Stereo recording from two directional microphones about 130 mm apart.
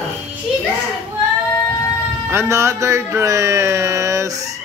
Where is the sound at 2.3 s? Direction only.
20° right (ahead or behind).